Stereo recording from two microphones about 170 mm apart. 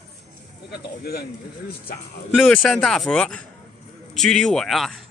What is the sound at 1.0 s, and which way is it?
Speech, 65° left (ahead or behind).